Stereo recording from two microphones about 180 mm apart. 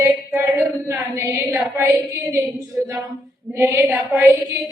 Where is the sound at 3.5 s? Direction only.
10° right (ahead or behind).